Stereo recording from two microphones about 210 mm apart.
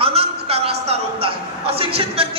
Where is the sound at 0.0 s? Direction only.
30° right (ahead or behind).